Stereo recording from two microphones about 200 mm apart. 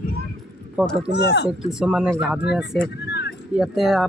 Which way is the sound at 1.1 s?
55° left (ahead or behind).